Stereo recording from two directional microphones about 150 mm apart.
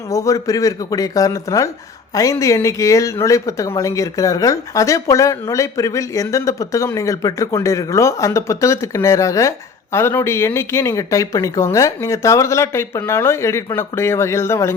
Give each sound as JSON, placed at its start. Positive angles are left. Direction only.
{"t": 0.1, "sound": "speech", "side_deg": 20}